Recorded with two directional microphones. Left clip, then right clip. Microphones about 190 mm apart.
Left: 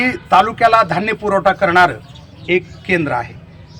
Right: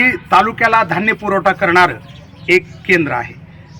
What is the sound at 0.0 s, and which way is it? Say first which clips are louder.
A man's voice: right 1 dB; 5° left (ahead or behind).